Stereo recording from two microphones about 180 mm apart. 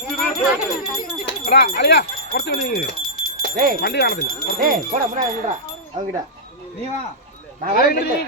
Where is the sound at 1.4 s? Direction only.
55° left (ahead or behind).